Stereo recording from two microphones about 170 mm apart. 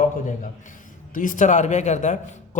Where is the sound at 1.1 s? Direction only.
50° left (ahead or behind).